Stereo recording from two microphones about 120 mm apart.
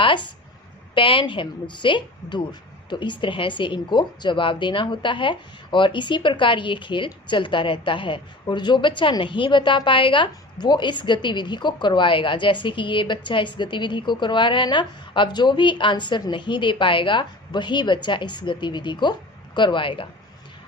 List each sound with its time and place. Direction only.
0.0 s a woman's voice: 40° left (ahead or behind)